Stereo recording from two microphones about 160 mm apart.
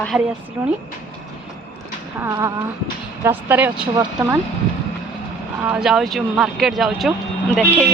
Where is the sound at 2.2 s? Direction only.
20° right (ahead or behind).